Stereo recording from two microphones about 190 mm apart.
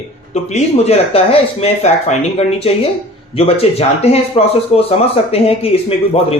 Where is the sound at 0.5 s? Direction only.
35° left (ahead or behind).